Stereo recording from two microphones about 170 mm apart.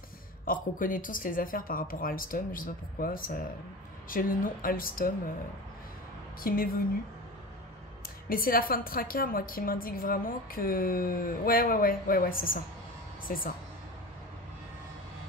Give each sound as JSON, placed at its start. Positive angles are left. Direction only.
{"t": 0.5, "sound": "a woman's voice", "side_deg": 55}
{"t": 6.4, "sound": "a woman's voice", "side_deg": 60}
{"t": 8.3, "sound": "a woman's voice", "side_deg": 55}